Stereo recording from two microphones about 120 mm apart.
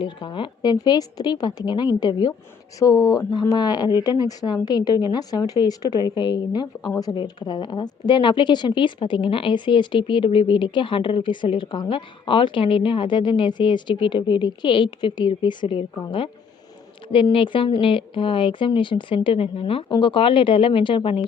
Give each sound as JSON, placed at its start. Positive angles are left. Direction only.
{"t": 0.0, "sound": "a woman's voice", "side_deg": 40}
{"t": 17.3, "sound": "speech", "side_deg": 45}